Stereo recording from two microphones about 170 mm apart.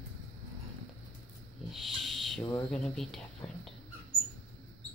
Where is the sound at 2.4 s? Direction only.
20° left (ahead or behind).